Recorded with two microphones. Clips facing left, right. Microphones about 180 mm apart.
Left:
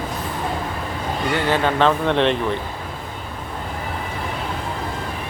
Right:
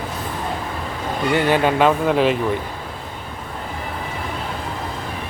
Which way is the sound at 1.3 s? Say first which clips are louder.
Right 3 dB; 15° right (ahead or behind).